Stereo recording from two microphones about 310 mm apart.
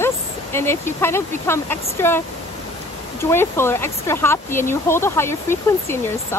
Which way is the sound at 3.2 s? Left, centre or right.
Centre.